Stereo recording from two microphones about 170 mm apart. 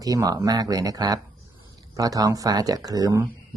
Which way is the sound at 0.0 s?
20° right (ahead or behind).